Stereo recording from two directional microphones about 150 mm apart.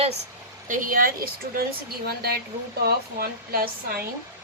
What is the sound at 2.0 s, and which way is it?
Speech, 90° right.